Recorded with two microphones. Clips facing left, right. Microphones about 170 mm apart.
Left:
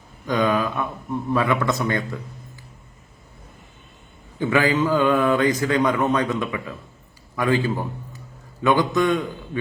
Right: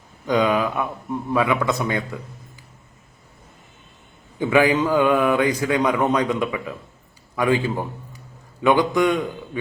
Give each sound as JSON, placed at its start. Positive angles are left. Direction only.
{"t": 0.3, "sound": "a man's voice", "side_deg": -15}
{"t": 4.4, "sound": "a man's voice", "side_deg": -15}